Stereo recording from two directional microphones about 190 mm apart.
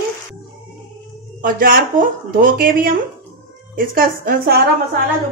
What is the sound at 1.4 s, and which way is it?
A woman's voice, 45° right (ahead or behind).